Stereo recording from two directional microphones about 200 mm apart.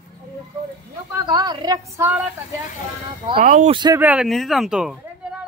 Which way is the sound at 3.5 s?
40° right (ahead or behind).